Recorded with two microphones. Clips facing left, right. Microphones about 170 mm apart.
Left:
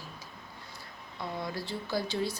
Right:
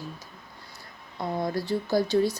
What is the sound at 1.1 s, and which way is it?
Speech, 45° right (ahead or behind).